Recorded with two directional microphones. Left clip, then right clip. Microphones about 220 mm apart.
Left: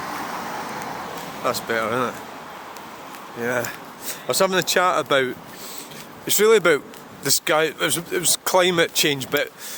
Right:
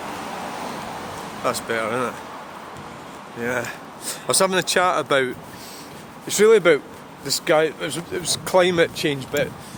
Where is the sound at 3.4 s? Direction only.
5° left (ahead or behind).